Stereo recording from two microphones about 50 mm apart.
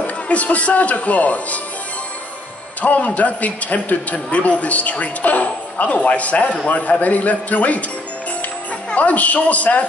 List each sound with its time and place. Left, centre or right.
0.0 s a man's voice: left
2.8 s a man's voice: left
8.9 s a man's voice: left